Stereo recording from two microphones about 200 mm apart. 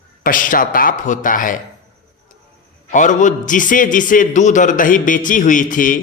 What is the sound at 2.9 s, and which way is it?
A man's voice, 40° left (ahead or behind).